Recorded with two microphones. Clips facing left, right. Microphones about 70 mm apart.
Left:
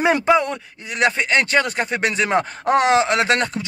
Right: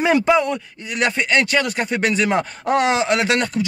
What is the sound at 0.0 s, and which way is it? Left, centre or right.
Speech, left.